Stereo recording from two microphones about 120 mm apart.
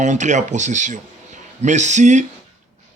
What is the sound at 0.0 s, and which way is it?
A man's voice, 85° right.